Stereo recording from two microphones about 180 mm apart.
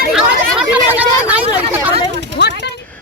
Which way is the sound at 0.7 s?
10° right (ahead or behind).